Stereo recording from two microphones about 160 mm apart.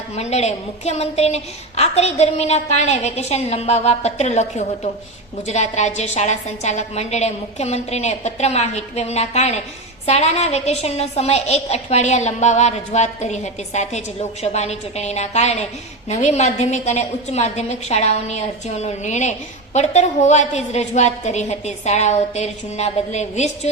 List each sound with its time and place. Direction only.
0.2 s a woman's voice: 45° left (ahead or behind)